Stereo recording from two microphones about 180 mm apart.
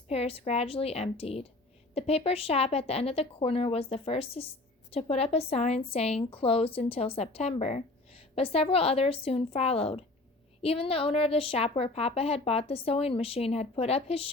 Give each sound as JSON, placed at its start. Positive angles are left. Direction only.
{"t": 0.1, "sound": "a woman's voice", "side_deg": 35}